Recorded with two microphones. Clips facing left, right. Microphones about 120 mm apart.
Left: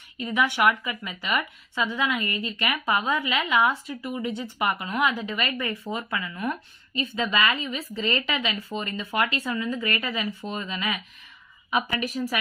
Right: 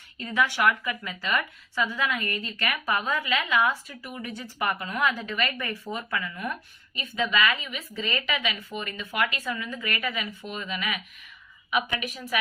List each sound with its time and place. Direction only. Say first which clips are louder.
0.2 s a woman's voice: left 2 dB; 20° left (ahead or behind); by 12.4 s 35° left (ahead or behind)